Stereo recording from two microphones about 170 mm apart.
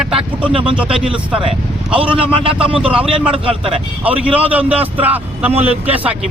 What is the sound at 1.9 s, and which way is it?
Speech, 30° right (ahead or behind).